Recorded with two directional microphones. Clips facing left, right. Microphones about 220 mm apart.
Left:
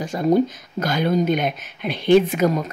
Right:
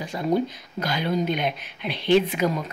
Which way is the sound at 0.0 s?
45° left (ahead or behind).